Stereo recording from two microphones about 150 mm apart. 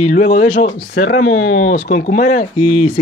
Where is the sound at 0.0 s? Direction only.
50° left (ahead or behind).